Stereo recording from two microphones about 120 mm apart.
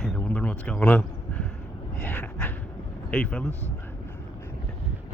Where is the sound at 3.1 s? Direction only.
10° left (ahead or behind).